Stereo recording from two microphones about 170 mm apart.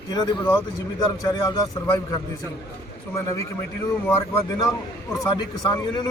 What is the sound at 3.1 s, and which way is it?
Speech, 20° left (ahead or behind).